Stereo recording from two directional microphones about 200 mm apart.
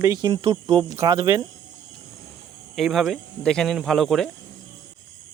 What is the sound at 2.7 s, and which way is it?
Speech, centre (ahead or behind).